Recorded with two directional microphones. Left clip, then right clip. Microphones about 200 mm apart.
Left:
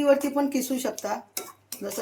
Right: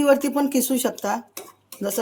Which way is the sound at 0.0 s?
65° right (ahead or behind).